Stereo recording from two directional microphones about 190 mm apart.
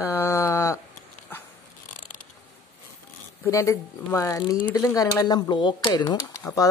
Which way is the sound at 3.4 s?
15° left (ahead or behind).